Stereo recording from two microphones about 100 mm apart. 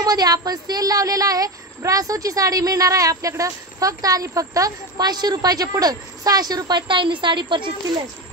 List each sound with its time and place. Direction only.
0.0 s speech: 40° right (ahead or behind)